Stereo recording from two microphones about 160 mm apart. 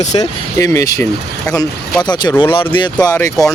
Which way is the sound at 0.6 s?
20° left (ahead or behind).